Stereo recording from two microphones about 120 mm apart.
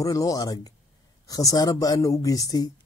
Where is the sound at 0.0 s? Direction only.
30° left (ahead or behind).